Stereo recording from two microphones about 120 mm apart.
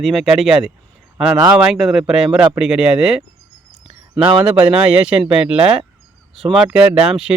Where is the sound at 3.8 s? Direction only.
45° right (ahead or behind).